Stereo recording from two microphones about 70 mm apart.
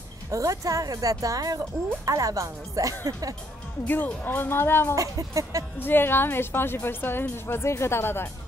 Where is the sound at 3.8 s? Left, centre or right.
Left.